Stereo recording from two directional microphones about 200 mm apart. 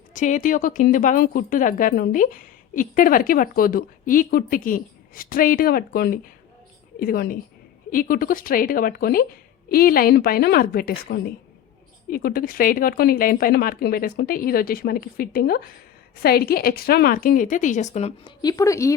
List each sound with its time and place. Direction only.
0.1 s speech: 40° left (ahead or behind)
18.4 s a woman's voice: 15° left (ahead or behind)